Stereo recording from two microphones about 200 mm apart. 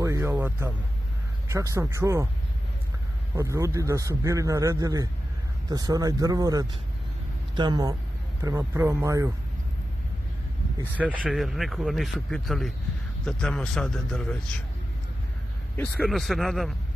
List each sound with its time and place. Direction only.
0.0 s music: 15° right (ahead or behind)
1.5 s a man's voice: 15° right (ahead or behind)
3.3 s a man's voice: 15° right (ahead or behind)
10.8 s a man's voice: 5° right (ahead or behind)
15.7 s a man's voice: 5° left (ahead or behind)